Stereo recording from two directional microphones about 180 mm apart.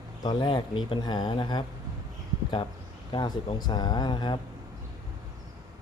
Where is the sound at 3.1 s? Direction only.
25° left (ahead or behind).